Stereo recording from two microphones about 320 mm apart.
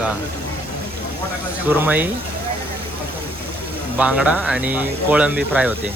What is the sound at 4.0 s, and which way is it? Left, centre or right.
Speech, centre.